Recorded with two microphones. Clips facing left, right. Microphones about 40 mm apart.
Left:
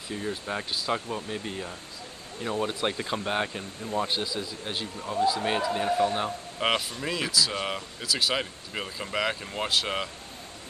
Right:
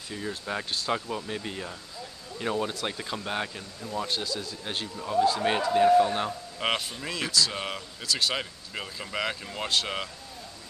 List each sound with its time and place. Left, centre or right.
0.1 s speech: centre
2.7 s speech: left
4.9 s speech: centre